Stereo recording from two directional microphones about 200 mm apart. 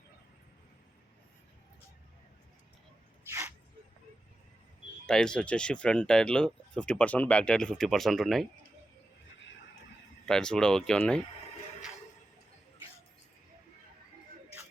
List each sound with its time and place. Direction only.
3.2 s a sound: 15° right (ahead or behind)
5.0 s speech: 5° left (ahead or behind)
10.2 s speech: 5° left (ahead or behind)